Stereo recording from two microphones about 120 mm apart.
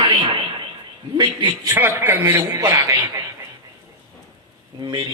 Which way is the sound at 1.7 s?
20° right (ahead or behind).